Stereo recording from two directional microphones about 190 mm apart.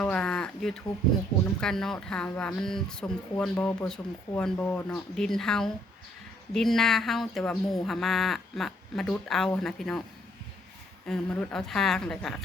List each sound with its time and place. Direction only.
0.0 s a sound: 5° left (ahead or behind)
1.6 s speech: centre (ahead or behind)
11.0 s speech: 5° left (ahead or behind)